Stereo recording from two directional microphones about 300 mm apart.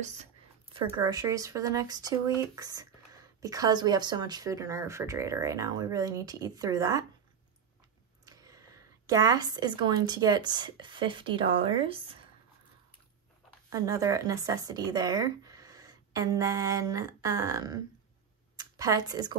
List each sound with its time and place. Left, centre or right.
0.0 s speech: right
8.3 s a woman's voice: centre
13.7 s a woman's voice: centre